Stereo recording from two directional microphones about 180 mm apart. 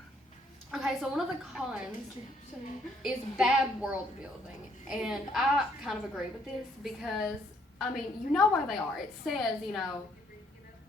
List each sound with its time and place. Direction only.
0.7 s a woman's voice: centre (ahead or behind)
3.0 s a woman's voice: 5° right (ahead or behind)
4.9 s a woman's voice: 5° right (ahead or behind)